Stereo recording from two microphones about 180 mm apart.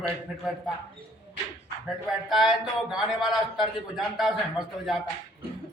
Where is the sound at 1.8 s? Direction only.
Centre (ahead or behind).